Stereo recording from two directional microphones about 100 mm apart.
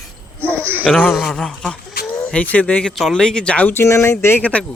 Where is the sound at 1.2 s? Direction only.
5° left (ahead or behind).